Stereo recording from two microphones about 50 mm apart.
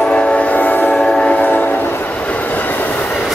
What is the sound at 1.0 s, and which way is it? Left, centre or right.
Train, left.